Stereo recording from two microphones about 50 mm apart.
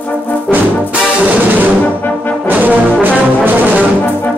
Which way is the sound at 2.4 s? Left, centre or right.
Right.